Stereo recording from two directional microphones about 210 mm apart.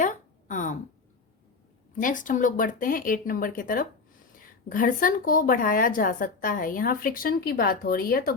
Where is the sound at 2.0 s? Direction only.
40° left (ahead or behind).